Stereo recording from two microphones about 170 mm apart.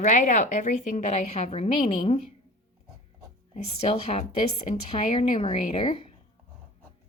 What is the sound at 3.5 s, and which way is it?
A woman's voice, 35° left (ahead or behind).